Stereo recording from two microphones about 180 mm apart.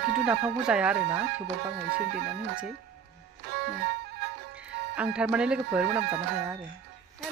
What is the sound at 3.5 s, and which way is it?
Music, 65° right (ahead or behind).